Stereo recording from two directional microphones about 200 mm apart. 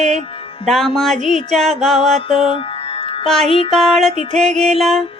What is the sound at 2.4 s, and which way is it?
Music, 25° left (ahead or behind).